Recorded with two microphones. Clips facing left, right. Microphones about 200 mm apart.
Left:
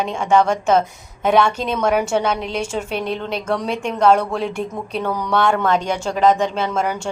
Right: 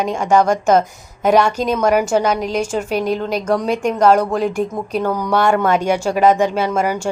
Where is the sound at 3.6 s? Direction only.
45° right (ahead or behind).